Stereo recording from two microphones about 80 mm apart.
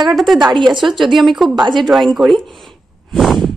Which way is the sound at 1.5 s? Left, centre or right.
Right.